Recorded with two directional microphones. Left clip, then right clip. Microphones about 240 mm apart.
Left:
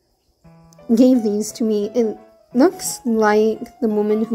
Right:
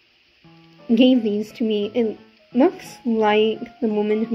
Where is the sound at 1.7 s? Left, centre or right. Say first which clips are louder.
Left 2 dB; left.